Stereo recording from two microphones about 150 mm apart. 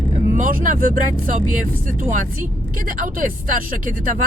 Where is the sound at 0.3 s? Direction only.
60° right (ahead or behind).